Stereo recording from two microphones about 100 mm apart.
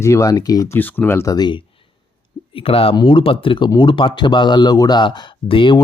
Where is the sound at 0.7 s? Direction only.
20° left (ahead or behind).